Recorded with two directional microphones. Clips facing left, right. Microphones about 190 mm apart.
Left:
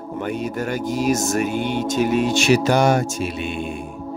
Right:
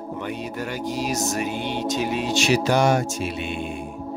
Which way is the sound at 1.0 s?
50° left (ahead or behind).